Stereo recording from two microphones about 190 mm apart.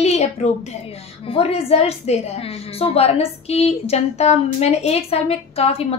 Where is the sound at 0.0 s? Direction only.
35° left (ahead or behind).